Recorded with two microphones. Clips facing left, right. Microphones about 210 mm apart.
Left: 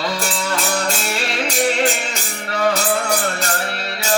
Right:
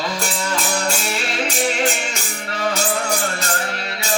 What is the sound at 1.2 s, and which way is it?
Music, 35° left (ahead or behind).